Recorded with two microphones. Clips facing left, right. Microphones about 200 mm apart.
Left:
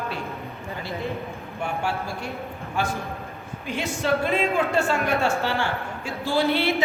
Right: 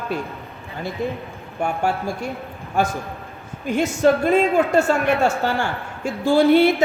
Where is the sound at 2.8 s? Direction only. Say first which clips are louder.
Right 5 dB; 45° right (ahead or behind).